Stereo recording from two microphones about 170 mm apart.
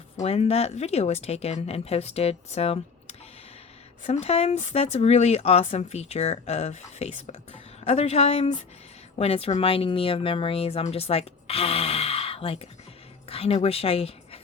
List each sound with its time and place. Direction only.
0.2 s speech: 40° left (ahead or behind)